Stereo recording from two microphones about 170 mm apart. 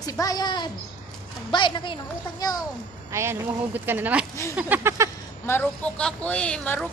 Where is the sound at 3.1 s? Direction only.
15° right (ahead or behind).